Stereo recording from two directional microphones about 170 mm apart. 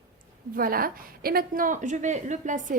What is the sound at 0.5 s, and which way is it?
A woman's voice, 60° right (ahead or behind).